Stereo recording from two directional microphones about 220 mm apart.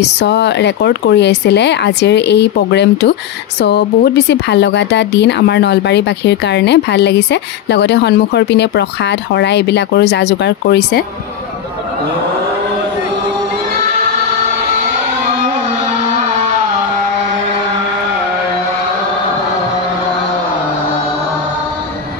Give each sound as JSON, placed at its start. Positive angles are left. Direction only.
{"t": 0.0, "sound": "speech", "side_deg": 50}